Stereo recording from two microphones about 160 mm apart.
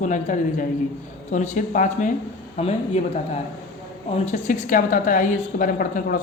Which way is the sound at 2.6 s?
40° left (ahead or behind).